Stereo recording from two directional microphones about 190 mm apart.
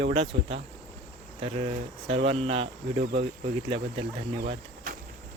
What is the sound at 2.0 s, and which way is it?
Speech, 30° right (ahead or behind).